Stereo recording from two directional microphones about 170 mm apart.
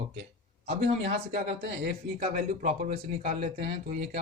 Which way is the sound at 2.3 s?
50° right (ahead or behind).